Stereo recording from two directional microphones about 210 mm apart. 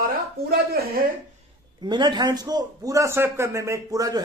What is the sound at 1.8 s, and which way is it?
Speech, 20° right (ahead or behind).